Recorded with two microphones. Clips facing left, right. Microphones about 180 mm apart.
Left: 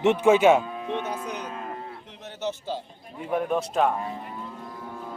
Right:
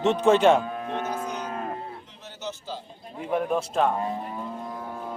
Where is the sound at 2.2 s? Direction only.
60° left (ahead or behind).